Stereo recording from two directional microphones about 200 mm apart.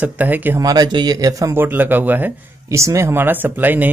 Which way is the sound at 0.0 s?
10° right (ahead or behind).